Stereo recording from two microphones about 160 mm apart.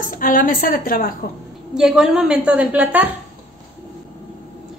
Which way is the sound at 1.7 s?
5° right (ahead or behind).